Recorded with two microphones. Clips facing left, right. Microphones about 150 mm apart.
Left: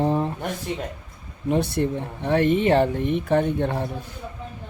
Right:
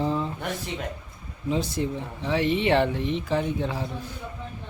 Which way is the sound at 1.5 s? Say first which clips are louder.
Left 4 dB; 60° left (ahead or behind).